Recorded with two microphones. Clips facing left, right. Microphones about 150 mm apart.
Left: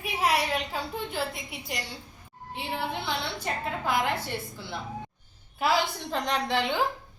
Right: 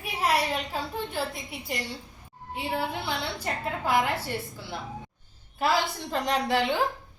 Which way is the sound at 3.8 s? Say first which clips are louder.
Right 3 dB; 5° right (ahead or behind).